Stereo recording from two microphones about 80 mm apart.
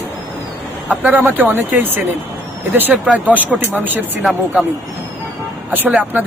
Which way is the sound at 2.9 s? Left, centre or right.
Centre.